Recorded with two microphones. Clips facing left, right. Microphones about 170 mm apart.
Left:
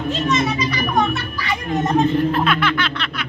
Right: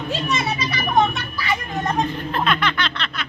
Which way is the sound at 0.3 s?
30° right (ahead or behind).